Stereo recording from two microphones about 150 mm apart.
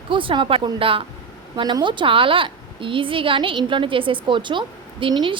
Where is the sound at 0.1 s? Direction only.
35° right (ahead or behind).